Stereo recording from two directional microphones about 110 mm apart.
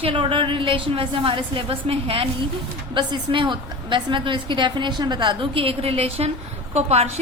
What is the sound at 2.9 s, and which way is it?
A woman's voice, 45° right (ahead or behind).